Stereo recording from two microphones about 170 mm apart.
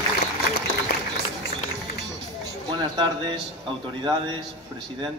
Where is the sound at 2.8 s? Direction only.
25° right (ahead or behind).